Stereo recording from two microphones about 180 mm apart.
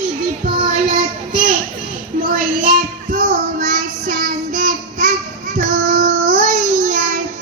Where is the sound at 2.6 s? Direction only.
50° right (ahead or behind).